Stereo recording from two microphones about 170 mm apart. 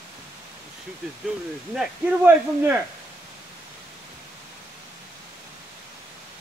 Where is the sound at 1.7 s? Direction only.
10° right (ahead or behind).